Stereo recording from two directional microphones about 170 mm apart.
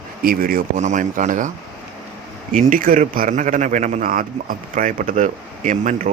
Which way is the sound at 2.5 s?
50° right (ahead or behind).